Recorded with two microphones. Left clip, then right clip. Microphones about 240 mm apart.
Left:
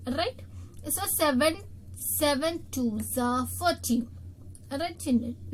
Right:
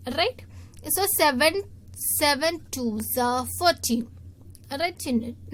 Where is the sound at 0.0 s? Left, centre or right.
Right.